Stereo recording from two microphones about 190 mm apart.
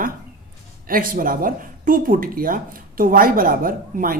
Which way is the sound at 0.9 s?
50° right (ahead or behind).